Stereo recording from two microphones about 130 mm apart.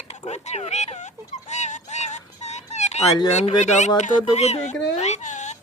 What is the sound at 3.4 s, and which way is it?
Speech, 65° left (ahead or behind).